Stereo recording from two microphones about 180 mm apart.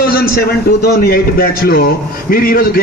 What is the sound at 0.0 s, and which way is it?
A man's voice, 55° left (ahead or behind).